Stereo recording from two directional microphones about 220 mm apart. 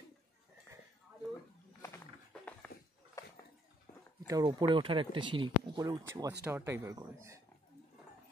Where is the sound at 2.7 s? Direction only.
45° left (ahead or behind).